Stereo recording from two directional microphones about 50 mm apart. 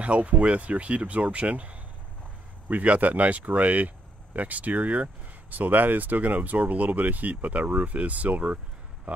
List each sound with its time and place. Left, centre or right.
0.0 s speech: right